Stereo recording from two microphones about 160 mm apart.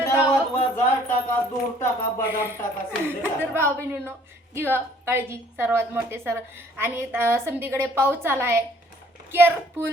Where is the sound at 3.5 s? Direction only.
15° right (ahead or behind).